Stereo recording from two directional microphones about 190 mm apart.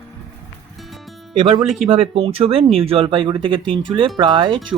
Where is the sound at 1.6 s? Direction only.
Centre (ahead or behind).